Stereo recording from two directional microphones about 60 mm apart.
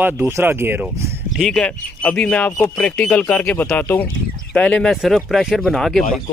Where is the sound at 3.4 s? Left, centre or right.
Left.